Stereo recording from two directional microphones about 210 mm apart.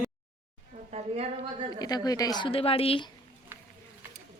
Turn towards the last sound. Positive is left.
turn(degrees=25)  # may be behind; listen again after turning